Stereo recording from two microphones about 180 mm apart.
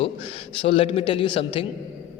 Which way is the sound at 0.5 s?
30° left (ahead or behind).